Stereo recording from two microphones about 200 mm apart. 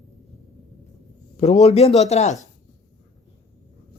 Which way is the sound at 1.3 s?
35° left (ahead or behind).